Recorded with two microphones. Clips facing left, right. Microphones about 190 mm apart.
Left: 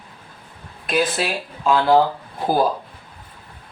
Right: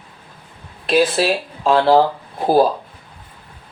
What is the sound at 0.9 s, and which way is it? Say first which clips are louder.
Speech: right 6 dB; 30° right (ahead or behind).